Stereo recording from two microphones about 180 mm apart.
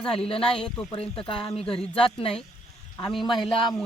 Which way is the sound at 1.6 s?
5° left (ahead or behind).